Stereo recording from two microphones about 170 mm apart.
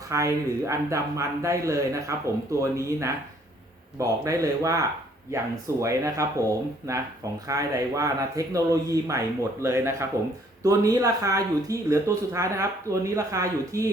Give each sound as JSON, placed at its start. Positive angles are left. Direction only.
{"t": 0.1, "sound": "speech", "side_deg": -15}